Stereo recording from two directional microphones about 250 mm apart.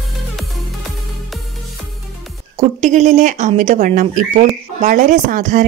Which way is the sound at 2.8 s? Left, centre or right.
Right.